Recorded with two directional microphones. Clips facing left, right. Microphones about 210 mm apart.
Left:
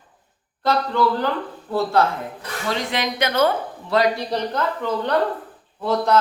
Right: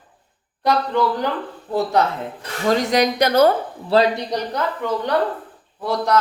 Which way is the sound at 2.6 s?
45° right (ahead or behind).